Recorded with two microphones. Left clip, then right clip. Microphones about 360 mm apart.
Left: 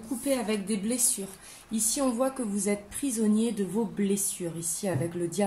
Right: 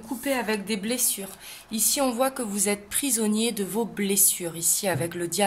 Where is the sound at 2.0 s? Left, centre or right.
Right.